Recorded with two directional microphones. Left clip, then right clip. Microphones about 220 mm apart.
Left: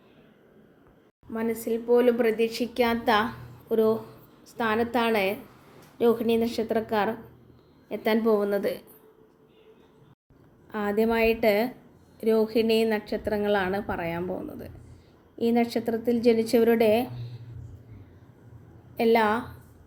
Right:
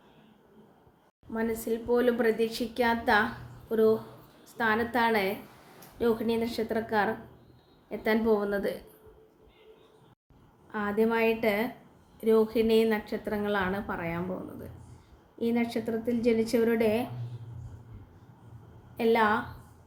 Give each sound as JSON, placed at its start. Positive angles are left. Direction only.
{"t": 1.3, "sound": "a woman's voice", "side_deg": 15}
{"t": 10.7, "sound": "a woman's voice", "side_deg": 15}
{"t": 18.9, "sound": "a woman's voice", "side_deg": 10}